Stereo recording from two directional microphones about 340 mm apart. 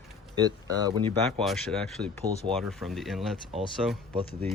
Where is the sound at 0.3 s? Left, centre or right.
Centre.